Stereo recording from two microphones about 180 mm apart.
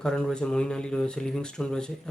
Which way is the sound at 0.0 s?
5° left (ahead or behind).